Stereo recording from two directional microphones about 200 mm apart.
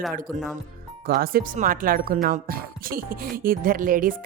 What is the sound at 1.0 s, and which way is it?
Speech, 45° right (ahead or behind).